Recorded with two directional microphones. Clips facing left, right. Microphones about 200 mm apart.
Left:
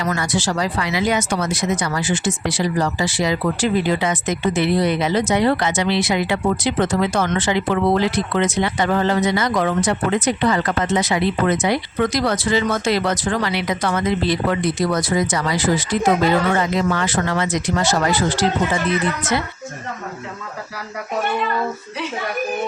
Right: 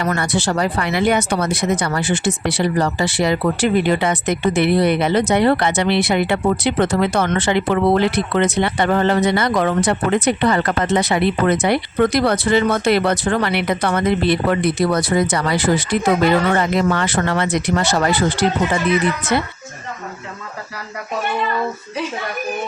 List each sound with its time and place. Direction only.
0.0 s speech: 60° right (ahead or behind)